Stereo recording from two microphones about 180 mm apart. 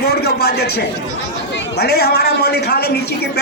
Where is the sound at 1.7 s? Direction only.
60° left (ahead or behind).